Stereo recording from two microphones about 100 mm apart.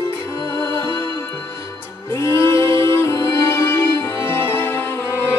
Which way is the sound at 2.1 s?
25° left (ahead or behind).